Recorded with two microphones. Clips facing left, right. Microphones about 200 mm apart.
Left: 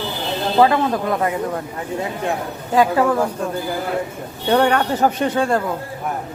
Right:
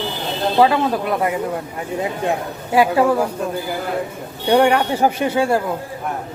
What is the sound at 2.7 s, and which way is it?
Speech, 15° right (ahead or behind).